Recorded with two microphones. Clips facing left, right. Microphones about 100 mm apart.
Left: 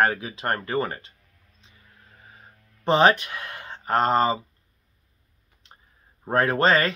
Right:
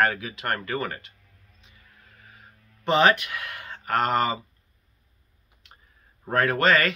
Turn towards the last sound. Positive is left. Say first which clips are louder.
# left 1 dB
turn(degrees=30)  # may be behind; listen again after turning